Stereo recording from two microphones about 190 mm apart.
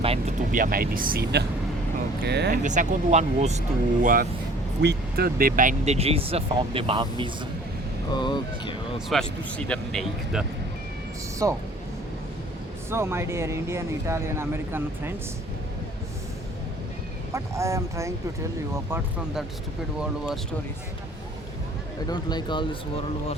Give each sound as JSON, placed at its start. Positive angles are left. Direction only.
{"t": 0.0, "sound": "vehicle", "side_deg": -30}
{"t": 0.5, "sound": "speech", "side_deg": -50}
{"t": 2.6, "sound": "speech", "side_deg": -40}
{"t": 4.0, "sound": "speech", "side_deg": -45}
{"t": 4.8, "sound": "speech", "side_deg": -60}
{"t": 8.1, "sound": "speech", "side_deg": 25}
{"t": 9.0, "sound": "speech", "side_deg": 5}
{"t": 11.4, "sound": "speech", "side_deg": -15}
{"t": 12.9, "sound": "speech", "side_deg": -15}
{"t": 17.3, "sound": "speech", "side_deg": -15}
{"t": 22.1, "sound": "speech", "side_deg": 20}